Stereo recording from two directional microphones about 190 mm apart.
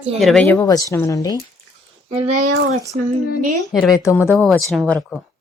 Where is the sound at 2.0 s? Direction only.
30° right (ahead or behind).